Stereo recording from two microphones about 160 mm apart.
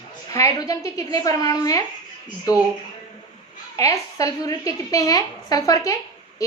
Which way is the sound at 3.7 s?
20° left (ahead or behind).